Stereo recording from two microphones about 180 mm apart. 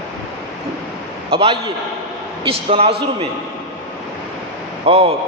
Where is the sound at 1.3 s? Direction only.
30° right (ahead or behind).